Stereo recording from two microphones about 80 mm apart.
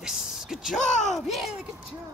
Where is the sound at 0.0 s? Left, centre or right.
Centre.